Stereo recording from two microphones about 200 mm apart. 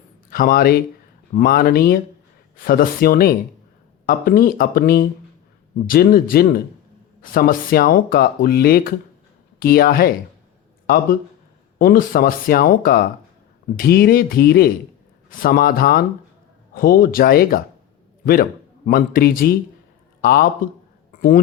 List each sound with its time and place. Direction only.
0.3 s a man's voice: 45° left (ahead or behind)
18.9 s speech: 45° left (ahead or behind)